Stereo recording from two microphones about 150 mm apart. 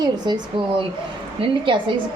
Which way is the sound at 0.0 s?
30° right (ahead or behind).